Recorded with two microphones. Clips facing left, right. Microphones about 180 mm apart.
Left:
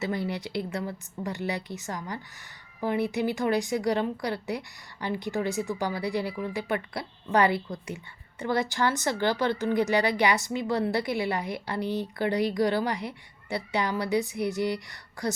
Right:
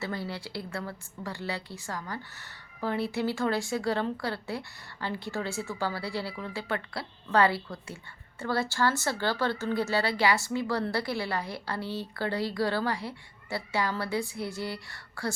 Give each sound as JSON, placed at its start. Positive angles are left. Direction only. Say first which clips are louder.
{"t": 0.0, "sound": "speech", "louder": "left 5 dB", "side_deg": 20}